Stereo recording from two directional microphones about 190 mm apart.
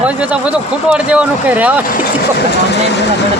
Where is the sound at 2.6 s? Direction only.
65° left (ahead or behind).